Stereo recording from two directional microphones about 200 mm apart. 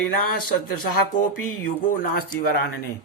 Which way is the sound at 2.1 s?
50° left (ahead or behind).